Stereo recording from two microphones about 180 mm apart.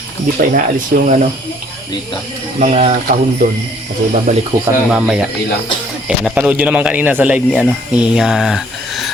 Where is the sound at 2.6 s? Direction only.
45° right (ahead or behind).